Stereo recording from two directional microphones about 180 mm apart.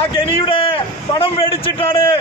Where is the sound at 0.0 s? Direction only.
30° left (ahead or behind).